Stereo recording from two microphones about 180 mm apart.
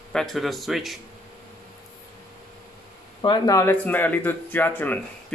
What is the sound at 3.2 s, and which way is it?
Speech, 25° left (ahead or behind).